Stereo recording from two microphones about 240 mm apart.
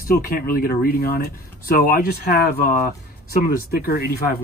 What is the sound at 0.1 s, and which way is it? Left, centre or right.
Speech, left.